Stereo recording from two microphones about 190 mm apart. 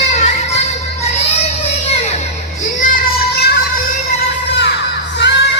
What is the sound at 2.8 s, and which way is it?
Child singing, 50° left (ahead or behind).